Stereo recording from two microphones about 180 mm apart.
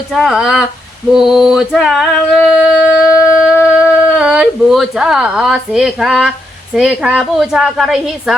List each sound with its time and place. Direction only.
0.1 s a woman's voice: centre (ahead or behind)
1.1 s a sound: centre (ahead or behind)
6.7 s a woman's voice: 5° right (ahead or behind)